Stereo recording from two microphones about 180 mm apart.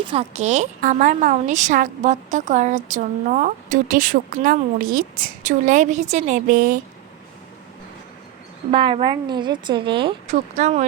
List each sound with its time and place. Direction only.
0.0 s a woman's voice: 30° right (ahead or behind); by 6.7 s 50° right (ahead or behind)
8.7 s a woman's voice: 30° right (ahead or behind)
10.3 s a woman's voice: 40° right (ahead or behind)